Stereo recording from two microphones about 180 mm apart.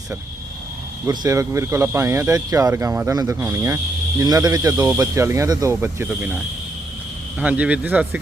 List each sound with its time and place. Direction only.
1.0 s speech: 20° right (ahead or behind)